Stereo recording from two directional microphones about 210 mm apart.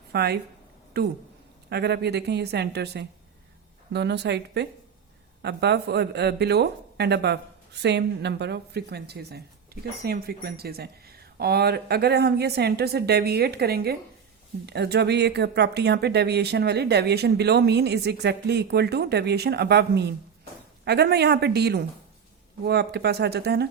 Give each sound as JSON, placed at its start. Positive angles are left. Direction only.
{"t": 0.1, "sound": "speech", "side_deg": -50}